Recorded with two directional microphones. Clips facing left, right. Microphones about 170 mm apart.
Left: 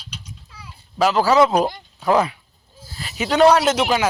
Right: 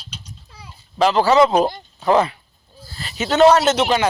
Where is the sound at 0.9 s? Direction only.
5° left (ahead or behind).